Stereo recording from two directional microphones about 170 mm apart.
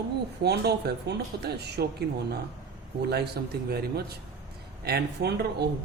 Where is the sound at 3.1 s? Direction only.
70° right (ahead or behind).